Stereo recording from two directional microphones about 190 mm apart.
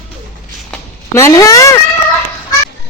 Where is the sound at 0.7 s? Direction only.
15° left (ahead or behind).